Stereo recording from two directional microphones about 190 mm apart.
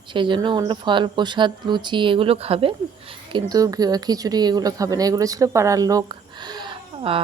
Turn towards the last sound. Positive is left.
turn(degrees=-25)  # may be behind; listen again after turning